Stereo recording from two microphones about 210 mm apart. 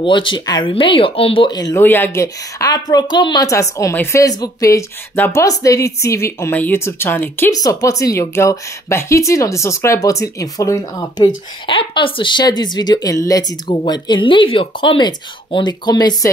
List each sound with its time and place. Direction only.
0.0 s speech: 25° left (ahead or behind)